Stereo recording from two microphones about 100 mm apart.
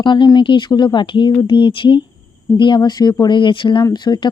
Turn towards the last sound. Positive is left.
turn(degrees=45)  # may be behind; listen again after turning